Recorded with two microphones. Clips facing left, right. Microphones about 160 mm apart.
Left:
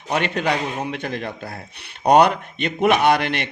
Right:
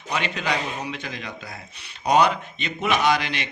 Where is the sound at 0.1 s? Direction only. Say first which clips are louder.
Left 5 dB; 55° left (ahead or behind).